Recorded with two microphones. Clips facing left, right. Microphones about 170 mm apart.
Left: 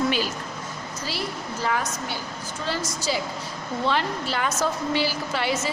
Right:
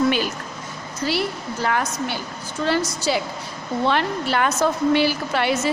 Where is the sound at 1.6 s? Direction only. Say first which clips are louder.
Right 4 dB; 65° right (ahead or behind).